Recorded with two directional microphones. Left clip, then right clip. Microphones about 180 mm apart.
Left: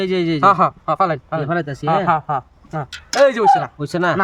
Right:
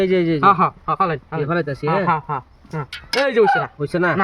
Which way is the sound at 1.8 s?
30° left (ahead or behind).